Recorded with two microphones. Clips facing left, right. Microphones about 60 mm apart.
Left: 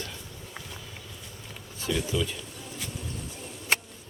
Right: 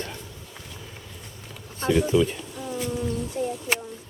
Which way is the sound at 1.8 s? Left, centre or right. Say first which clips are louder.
Right 8 dB; right.